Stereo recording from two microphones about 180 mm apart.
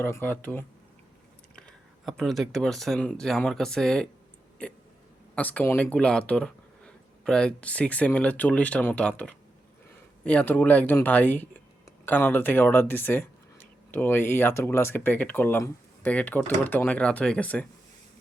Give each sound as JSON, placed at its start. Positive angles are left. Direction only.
{"t": 0.0, "sound": "speech", "side_deg": 10}